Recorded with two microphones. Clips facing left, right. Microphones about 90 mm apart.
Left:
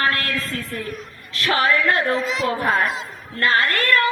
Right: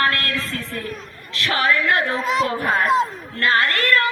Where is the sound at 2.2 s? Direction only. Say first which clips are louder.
Right 4 dB; 45° right (ahead or behind).